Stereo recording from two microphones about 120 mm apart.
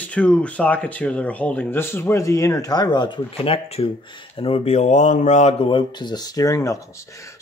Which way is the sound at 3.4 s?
55° left (ahead or behind).